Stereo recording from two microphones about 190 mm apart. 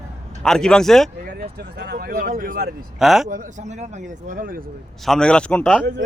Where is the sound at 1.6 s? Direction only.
60° right (ahead or behind).